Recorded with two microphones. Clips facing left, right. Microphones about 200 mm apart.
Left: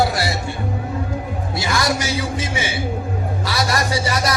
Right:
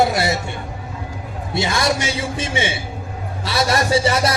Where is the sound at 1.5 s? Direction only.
25° right (ahead or behind).